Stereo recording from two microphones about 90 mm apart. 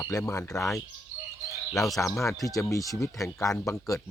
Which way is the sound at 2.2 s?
40° left (ahead or behind).